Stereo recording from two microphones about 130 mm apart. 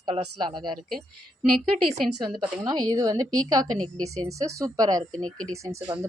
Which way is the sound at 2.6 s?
30° right (ahead or behind).